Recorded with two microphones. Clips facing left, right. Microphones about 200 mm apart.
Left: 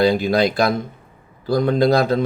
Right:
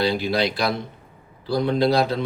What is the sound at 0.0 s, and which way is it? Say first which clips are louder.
A man's voice: left 5 dB; 45° left (ahead or behind).